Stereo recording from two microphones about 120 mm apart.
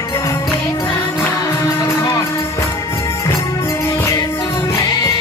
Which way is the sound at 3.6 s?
25° left (ahead or behind).